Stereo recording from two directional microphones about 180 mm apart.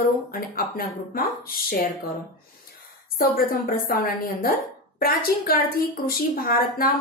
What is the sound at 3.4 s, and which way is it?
Speech, 55° left (ahead or behind).